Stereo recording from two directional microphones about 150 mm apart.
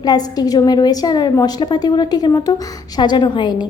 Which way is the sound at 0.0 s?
25° left (ahead or behind).